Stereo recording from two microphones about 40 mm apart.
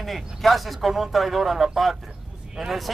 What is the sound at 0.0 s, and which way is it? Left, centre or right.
A man's voice, centre.